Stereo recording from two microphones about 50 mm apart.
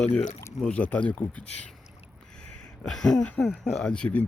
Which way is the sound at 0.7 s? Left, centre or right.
Left.